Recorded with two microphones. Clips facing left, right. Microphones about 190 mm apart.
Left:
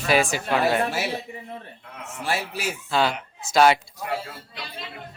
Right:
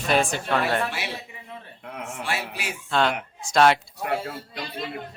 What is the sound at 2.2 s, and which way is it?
Speech, 40° left (ahead or behind).